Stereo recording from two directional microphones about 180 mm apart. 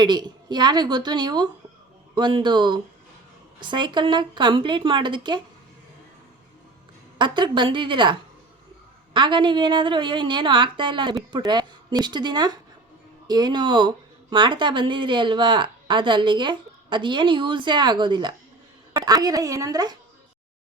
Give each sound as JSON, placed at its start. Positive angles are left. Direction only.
{"t": 0.0, "sound": "speech", "side_deg": -25}
{"t": 7.2, "sound": "speech", "side_deg": -25}
{"t": 9.1, "sound": "speech", "side_deg": -25}